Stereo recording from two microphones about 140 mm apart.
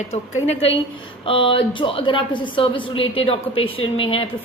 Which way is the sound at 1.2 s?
40° left (ahead or behind).